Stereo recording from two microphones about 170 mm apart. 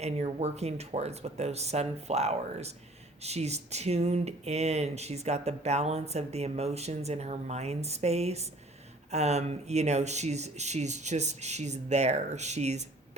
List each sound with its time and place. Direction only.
0.0 s speech: 40° right (ahead or behind)